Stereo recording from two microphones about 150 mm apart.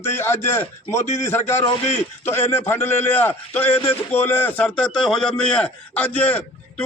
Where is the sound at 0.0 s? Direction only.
15° left (ahead or behind).